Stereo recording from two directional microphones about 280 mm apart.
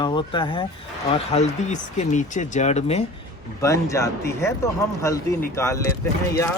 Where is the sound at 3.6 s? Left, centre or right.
Centre.